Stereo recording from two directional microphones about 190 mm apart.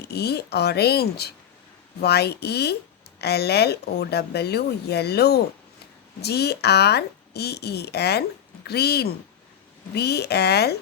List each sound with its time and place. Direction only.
0.0 s speech: 60° left (ahead or behind)